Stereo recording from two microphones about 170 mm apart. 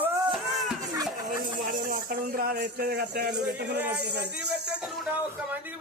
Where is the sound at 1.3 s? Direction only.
55° right (ahead or behind); by 4.2 s 75° right (ahead or behind).